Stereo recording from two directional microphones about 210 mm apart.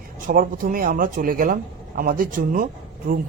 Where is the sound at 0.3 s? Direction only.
40° right (ahead or behind).